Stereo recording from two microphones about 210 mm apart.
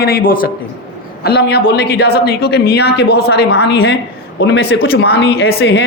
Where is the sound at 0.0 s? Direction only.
45° left (ahead or behind).